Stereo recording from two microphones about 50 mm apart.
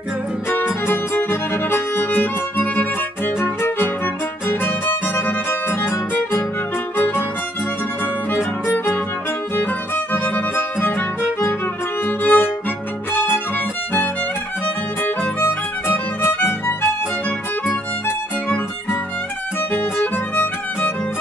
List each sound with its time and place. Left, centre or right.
0.8 s music: left
2.6 s music: left
5.0 s music: left
10.1 s music: left
12.2 s music: left